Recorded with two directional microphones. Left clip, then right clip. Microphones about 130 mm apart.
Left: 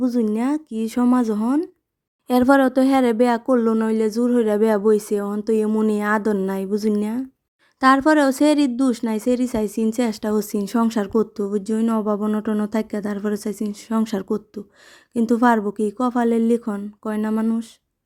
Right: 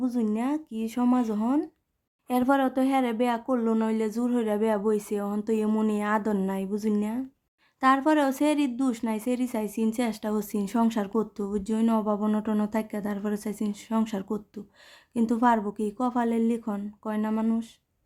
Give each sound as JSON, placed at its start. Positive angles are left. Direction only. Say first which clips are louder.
{"t": 0.0, "sound": "speech", "louder": "left 7 dB", "side_deg": 40}
{"t": 2.2, "sound": "speech", "louder": "left 8 dB", "side_deg": 50}
{"t": 5.9, "sound": "speech", "louder": "left 7 dB", "side_deg": 45}